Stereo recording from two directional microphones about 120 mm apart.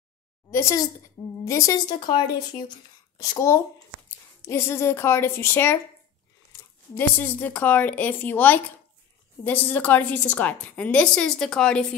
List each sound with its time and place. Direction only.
0.5 s a woman's voice: 25° left (ahead or behind)
1.9 s a woman's voice: 40° left (ahead or behind); by 11.8 s 5° left (ahead or behind)